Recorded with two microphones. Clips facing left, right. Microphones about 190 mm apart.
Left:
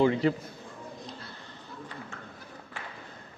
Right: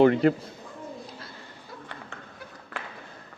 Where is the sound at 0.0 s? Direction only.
60° right (ahead or behind).